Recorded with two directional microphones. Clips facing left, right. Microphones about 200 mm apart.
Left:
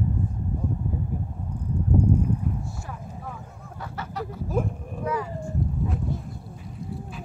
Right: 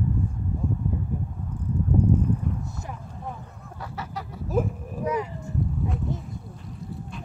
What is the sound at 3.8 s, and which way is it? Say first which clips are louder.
Honk: left 2 dB; centre (ahead or behind).